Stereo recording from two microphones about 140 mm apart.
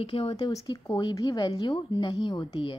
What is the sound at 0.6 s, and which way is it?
A woman's voice, 30° left (ahead or behind).